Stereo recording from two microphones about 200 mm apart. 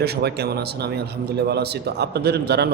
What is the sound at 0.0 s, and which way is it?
Speech, 55° right (ahead or behind).